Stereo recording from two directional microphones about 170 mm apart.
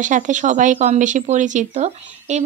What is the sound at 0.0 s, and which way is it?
A woman's voice, 45° right (ahead or behind).